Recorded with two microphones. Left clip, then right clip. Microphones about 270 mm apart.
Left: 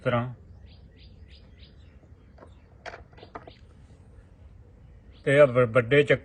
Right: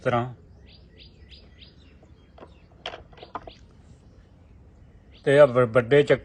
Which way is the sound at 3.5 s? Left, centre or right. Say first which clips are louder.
Right 5 dB; right.